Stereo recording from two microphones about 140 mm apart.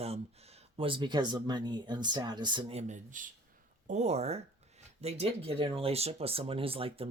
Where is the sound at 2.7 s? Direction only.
55° right (ahead or behind).